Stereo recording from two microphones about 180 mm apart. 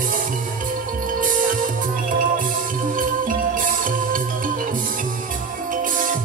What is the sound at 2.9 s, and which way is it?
Music, 50° right (ahead or behind).